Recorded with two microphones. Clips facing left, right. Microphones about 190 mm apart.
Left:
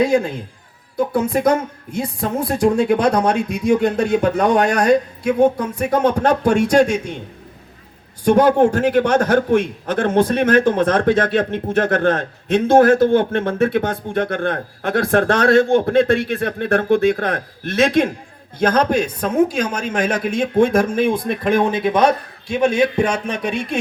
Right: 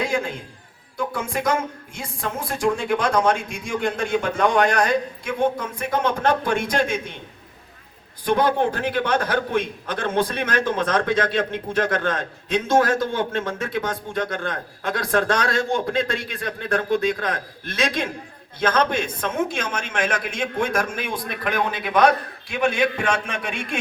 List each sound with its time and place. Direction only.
0.9 s speech: 40° left (ahead or behind)
2.5 s speech: 40° left (ahead or behind)
8.2 s a man's voice: 45° left (ahead or behind)
18.6 s a man's voice: 40° left (ahead or behind); by 22.1 s 25° left (ahead or behind)
22.6 s speech: 40° left (ahead or behind)